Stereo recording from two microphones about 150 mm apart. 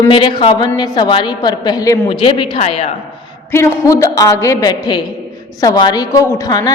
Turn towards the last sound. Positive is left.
turn(degrees=25)  # may be behind; listen again after turning